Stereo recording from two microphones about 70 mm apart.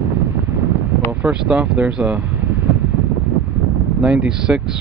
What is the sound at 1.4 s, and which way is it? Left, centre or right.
Speech, centre.